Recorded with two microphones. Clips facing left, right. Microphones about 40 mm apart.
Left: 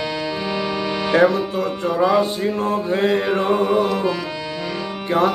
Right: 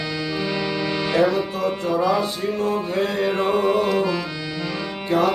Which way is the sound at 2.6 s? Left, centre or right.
Left.